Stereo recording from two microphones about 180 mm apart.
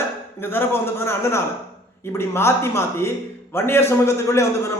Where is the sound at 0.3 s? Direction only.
10° left (ahead or behind).